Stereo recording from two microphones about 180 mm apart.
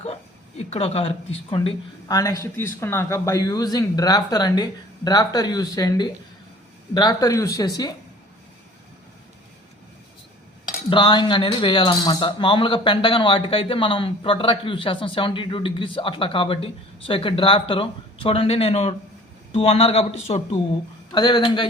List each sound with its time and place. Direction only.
0.0 s speech: 35° left (ahead or behind)
10.8 s a man's voice: 25° left (ahead or behind)